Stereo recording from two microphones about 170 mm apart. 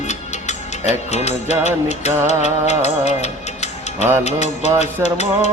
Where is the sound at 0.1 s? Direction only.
45° left (ahead or behind).